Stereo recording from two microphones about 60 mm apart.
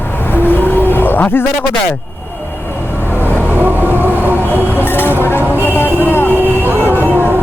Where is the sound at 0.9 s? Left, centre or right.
Left.